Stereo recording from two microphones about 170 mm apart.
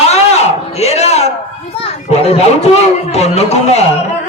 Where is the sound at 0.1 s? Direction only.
40° left (ahead or behind).